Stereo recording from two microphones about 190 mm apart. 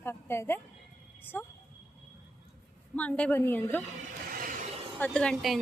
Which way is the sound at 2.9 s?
5° left (ahead or behind).